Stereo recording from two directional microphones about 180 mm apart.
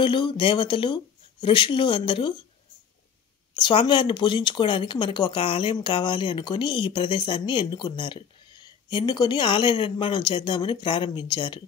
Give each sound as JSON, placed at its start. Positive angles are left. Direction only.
{"t": 0.0, "sound": "speech", "side_deg": 25}
{"t": 3.5, "sound": "speech", "side_deg": 25}